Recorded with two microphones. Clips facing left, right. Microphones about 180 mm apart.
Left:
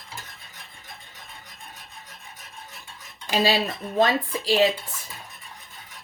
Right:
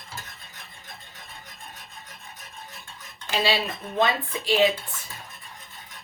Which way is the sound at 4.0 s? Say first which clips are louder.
Left 3 dB; 35° left (ahead or behind).